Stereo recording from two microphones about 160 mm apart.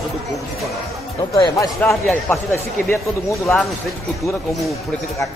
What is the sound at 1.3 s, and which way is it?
Speech, 20° left (ahead or behind).